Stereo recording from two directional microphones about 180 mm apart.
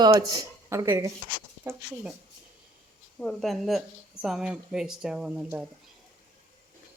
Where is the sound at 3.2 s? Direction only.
Centre (ahead or behind).